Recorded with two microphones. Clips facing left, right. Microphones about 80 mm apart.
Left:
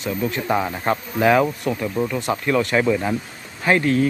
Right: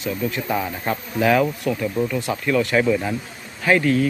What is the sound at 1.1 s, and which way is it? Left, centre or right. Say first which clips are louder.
Speech: left 1 dB; left.